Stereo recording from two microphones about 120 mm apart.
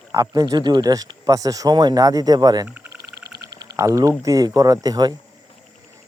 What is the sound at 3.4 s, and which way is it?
Insect, 35° right (ahead or behind).